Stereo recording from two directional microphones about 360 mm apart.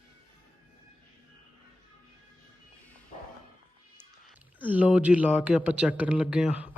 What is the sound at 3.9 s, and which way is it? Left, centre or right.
A man's voice, centre.